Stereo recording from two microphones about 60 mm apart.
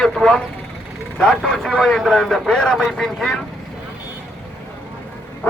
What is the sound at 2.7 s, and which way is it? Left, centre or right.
Speech, centre.